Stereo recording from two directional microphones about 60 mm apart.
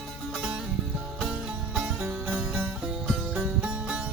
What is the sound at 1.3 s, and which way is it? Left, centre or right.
Music, centre.